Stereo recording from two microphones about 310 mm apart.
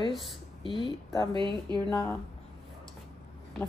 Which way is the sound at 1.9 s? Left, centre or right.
Centre.